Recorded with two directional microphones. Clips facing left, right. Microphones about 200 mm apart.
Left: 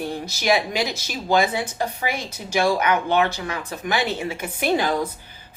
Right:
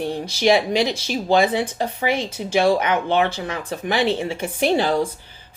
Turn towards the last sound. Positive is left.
turn(degrees=-30)  # may be behind; listen again after turning